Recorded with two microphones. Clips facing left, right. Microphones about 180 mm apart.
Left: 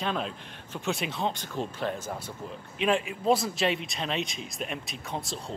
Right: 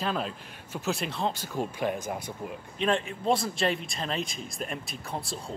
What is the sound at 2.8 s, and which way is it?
Speech, 5° left (ahead or behind).